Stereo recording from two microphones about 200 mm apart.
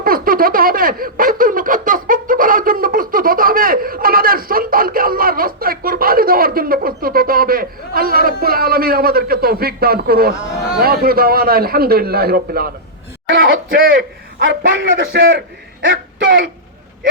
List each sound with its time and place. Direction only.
0.0 s a sound: 45° right (ahead or behind)
10.8 s a man's voice: 50° right (ahead or behind)
14.7 s speech: 70° right (ahead or behind)
16.2 s speech: 45° right (ahead or behind)